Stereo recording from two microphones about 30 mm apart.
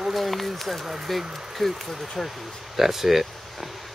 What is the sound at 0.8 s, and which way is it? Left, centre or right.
Speech, centre.